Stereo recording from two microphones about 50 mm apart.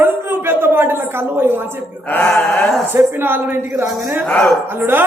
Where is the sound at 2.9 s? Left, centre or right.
Right.